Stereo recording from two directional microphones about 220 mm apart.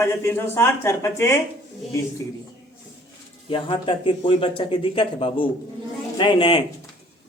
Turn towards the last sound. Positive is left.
turn(degrees=20)  # may be behind; listen again after turning